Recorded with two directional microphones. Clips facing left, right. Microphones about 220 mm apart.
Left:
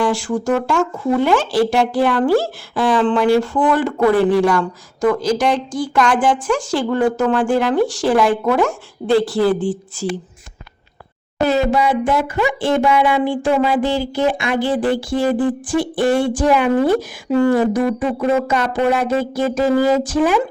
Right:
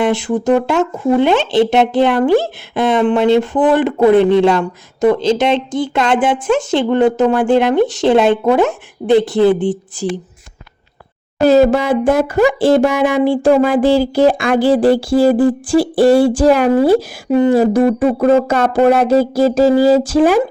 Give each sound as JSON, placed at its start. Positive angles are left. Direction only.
{"t": 0.0, "sound": "speech", "side_deg": -20}
{"t": 12.0, "sound": "speech", "side_deg": -40}
{"t": 17.3, "sound": "speech", "side_deg": -20}
{"t": 17.6, "sound": "speech", "side_deg": -30}
{"t": 18.0, "sound": "speech", "side_deg": -40}